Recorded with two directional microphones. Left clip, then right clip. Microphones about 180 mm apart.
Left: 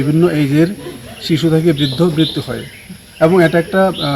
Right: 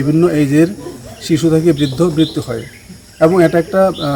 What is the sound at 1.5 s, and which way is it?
Speech, 10° right (ahead or behind).